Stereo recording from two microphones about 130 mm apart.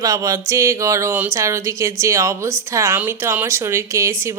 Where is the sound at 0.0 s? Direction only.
25° right (ahead or behind).